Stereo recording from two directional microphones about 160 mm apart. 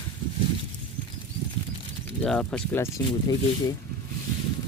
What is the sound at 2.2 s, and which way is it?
Speech, 5° left (ahead or behind).